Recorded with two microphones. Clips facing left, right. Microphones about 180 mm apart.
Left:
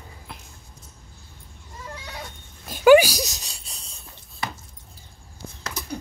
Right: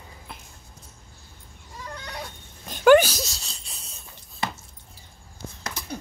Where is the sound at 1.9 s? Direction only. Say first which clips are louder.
Right 3 dB; centre (ahead or behind).